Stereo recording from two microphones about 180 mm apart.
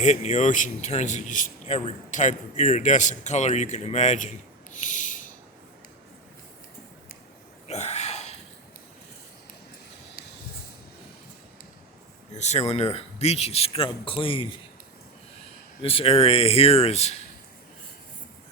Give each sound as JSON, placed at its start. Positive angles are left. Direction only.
{"t": 0.0, "sound": "a man's voice", "side_deg": 40}
{"t": 7.7, "sound": "a sound", "side_deg": 35}
{"t": 12.3, "sound": "a man's voice", "side_deg": 40}
{"t": 15.8, "sound": "a man's voice", "side_deg": 30}